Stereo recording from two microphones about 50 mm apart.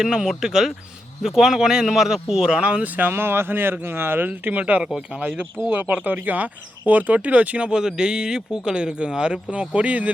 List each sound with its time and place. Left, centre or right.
0.0 s speech: centre; by 3.1 s right
3.1 s speech: right
7.7 s speech: centre